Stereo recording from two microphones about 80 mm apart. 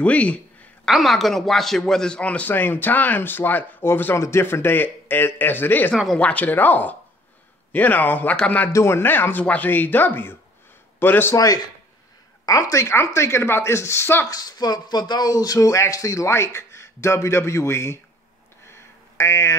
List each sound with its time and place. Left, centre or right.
0.0 s a man's voice: centre
0.8 s a man's voice: centre
2.5 s speech: left
8.7 s speech: left
11.3 s a woman's voice: left
12.8 s speech: left
14.2 s speech: left
18.7 s a sound: left